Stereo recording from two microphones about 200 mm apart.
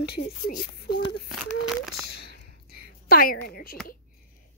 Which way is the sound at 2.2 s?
50° left (ahead or behind).